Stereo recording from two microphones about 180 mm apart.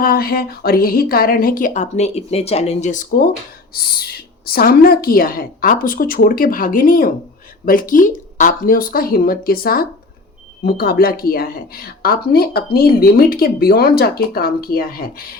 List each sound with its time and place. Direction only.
0.0 s a woman's voice: 55° left (ahead or behind)
3.8 s a woman's voice: 60° left (ahead or behind)